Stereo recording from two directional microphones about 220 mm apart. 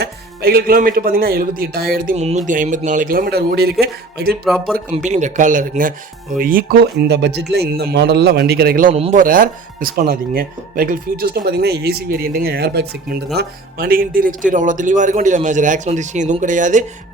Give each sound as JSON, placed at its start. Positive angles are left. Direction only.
{"t": 0.0, "sound": "speech", "side_deg": -45}
{"t": 4.4, "sound": "speech", "side_deg": 0}
{"t": 5.0, "sound": "speech", "side_deg": -35}
{"t": 8.9, "sound": "speech", "side_deg": -30}